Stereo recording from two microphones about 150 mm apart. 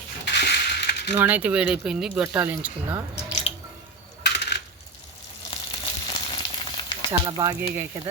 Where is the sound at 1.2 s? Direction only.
10° right (ahead or behind).